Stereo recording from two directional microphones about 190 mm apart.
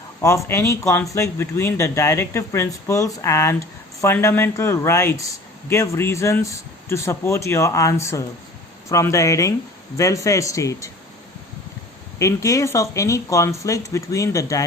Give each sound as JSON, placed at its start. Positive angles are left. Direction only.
{"t": 0.2, "sound": "speech", "side_deg": 15}
{"t": 12.2, "sound": "speech", "side_deg": 15}